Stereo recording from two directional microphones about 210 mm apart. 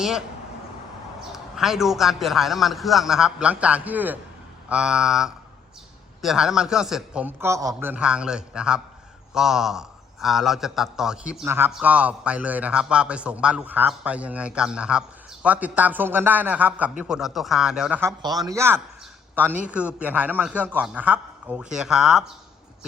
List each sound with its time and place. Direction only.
1.3 s a man's voice: centre (ahead or behind)
18.2 s a man's voice: 20° right (ahead or behind); by 22.2 s centre (ahead or behind)